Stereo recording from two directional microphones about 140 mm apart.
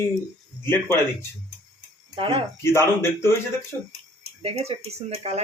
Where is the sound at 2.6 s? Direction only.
15° left (ahead or behind).